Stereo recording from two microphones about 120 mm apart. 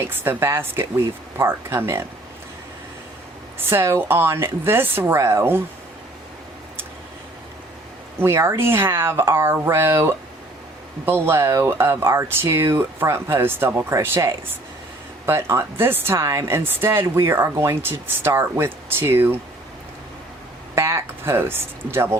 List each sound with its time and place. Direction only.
0.0 s speech: 20° right (ahead or behind)
3.7 s speech: 20° right (ahead or behind)
8.2 s speech: 20° right (ahead or behind)
20.7 s speech: 25° right (ahead or behind)